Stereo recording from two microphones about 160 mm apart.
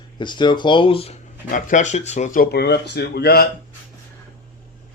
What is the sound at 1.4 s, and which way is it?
Speech, 55° left (ahead or behind).